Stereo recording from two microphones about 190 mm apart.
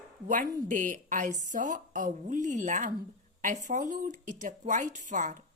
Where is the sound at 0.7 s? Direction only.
40° right (ahead or behind).